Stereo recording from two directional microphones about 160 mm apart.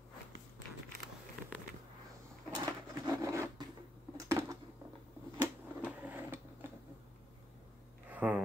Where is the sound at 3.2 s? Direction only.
20° right (ahead or behind).